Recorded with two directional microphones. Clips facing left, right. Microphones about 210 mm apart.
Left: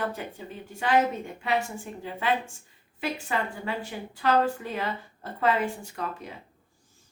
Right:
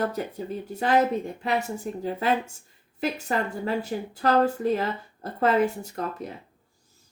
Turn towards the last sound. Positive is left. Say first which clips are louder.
# right 4 dB
turn(degrees=-40)  # may be behind; listen again after turning